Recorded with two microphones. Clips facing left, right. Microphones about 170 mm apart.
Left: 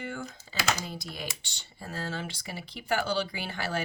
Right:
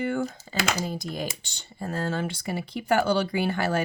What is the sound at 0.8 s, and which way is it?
Speech, 45° right (ahead or behind).